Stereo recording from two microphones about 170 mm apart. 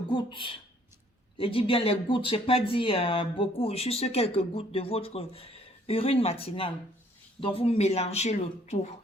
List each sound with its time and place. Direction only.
0.1 s speech: 30° left (ahead or behind)